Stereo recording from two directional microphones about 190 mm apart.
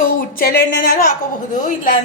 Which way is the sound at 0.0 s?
50° left (ahead or behind).